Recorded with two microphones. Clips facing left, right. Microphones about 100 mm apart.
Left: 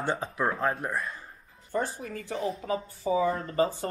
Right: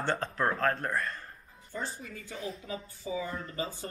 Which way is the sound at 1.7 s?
50° left (ahead or behind).